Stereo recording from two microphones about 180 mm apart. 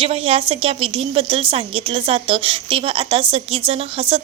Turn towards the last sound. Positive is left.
turn(degrees=-30)  # may be behind; listen again after turning